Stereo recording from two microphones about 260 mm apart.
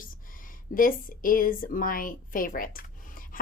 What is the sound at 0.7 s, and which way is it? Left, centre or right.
Speech, left.